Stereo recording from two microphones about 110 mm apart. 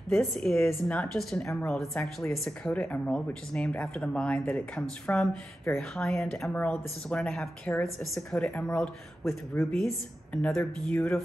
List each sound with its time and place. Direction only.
0.1 s speech: 5° left (ahead or behind)
9.5 s speech: 15° left (ahead or behind)